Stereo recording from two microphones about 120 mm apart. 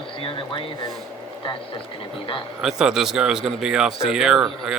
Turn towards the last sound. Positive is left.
turn(degrees=-5)  # may be behind; listen again after turning